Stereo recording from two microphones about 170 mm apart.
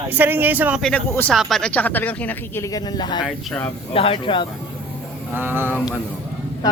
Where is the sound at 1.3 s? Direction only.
Centre (ahead or behind); by 3.2 s 25° left (ahead or behind).